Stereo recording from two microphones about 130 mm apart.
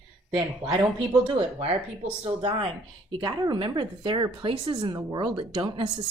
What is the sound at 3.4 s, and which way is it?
Speech, 30° right (ahead or behind).